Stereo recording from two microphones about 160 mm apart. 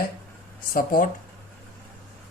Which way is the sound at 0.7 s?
60° left (ahead or behind).